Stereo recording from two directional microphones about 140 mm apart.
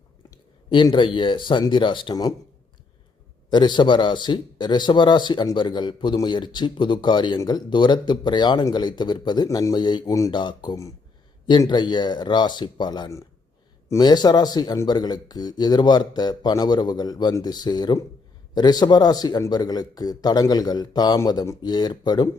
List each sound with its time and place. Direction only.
0.7 s speech: 35° left (ahead or behind)
3.5 s speech: 35° left (ahead or behind)